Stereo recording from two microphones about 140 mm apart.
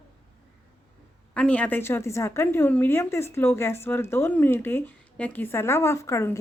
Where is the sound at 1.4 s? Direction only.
10° left (ahead or behind).